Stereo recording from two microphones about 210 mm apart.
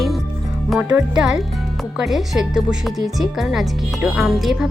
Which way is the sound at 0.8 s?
10° right (ahead or behind).